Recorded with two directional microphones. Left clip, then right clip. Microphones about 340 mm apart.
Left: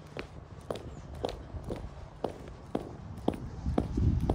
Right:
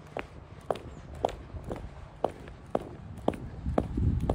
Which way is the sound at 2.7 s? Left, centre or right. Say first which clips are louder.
Right 5 dB; centre.